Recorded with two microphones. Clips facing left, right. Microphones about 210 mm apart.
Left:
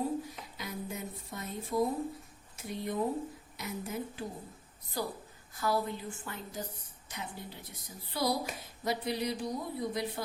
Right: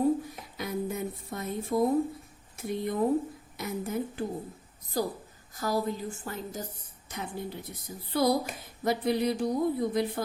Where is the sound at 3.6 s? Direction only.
55° right (ahead or behind).